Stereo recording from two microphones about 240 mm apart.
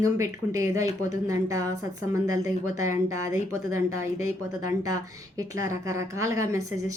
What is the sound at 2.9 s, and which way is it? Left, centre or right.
A woman's voice, right.